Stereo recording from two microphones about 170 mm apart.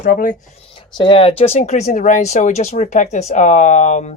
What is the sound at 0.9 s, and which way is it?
Speech, 30° left (ahead or behind).